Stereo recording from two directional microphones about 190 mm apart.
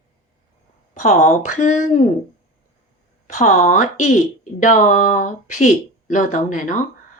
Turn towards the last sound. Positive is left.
turn(degrees=40)  # may be behind; listen again after turning